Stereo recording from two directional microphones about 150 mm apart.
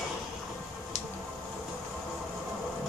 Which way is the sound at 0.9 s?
50° left (ahead or behind).